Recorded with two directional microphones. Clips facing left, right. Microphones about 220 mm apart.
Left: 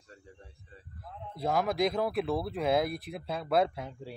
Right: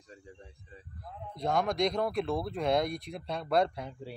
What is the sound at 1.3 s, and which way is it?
Speech, 5° left (ahead or behind).